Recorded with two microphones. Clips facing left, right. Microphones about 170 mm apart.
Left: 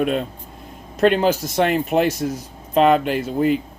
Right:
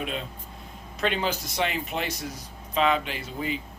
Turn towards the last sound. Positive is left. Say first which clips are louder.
# left 13 dB
turn(degrees=55)  # may be behind; listen again after turning